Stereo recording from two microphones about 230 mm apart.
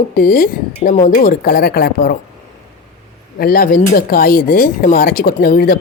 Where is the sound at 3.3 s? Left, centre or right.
Left.